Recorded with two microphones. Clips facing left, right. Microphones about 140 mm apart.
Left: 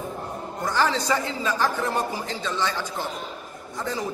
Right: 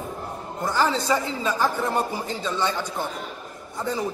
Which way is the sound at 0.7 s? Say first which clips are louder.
Right 1 dB; 5° right (ahead or behind).